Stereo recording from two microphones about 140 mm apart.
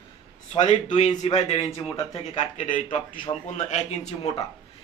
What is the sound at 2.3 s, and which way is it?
Speech, 65° left (ahead or behind).